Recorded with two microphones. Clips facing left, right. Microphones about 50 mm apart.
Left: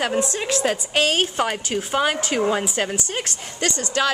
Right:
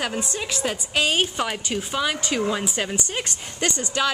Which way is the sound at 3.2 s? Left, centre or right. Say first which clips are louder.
Left 1 dB; right.